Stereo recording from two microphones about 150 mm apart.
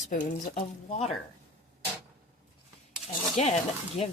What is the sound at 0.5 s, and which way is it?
Speech, 45° left (ahead or behind).